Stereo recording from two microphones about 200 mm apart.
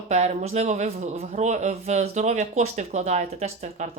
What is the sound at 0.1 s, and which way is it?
Speech, 35° right (ahead or behind).